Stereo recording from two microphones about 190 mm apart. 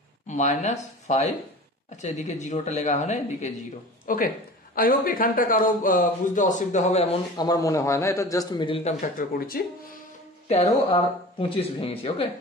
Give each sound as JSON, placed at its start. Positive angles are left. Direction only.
{"t": 0.3, "sound": "a man's voice", "side_deg": 40}
{"t": 7.3, "sound": "a man's voice", "side_deg": 20}
{"t": 9.0, "sound": "a man's voice", "side_deg": 50}
{"t": 10.5, "sound": "speech", "side_deg": 30}